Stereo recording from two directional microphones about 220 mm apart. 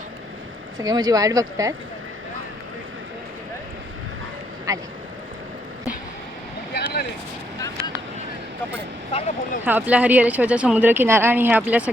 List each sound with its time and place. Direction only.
0.8 s speech: 15° right (ahead or behind)
4.7 s speech: 15° right (ahead or behind)
6.7 s vehicle: 45° left (ahead or behind)
9.1 s speech: 30° left (ahead or behind)
9.6 s speech: 5° right (ahead or behind)